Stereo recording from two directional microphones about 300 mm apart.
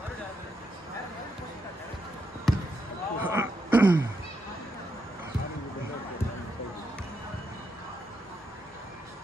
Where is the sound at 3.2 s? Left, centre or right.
Centre.